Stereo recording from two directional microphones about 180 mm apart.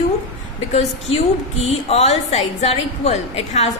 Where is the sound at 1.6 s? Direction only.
35° left (ahead or behind).